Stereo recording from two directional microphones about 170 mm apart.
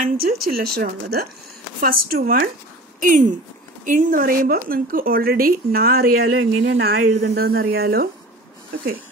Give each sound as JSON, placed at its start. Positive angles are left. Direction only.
{"t": 0.0, "sound": "speech", "side_deg": -60}
{"t": 3.0, "sound": "speech", "side_deg": -50}
{"t": 7.2, "sound": "speech", "side_deg": -65}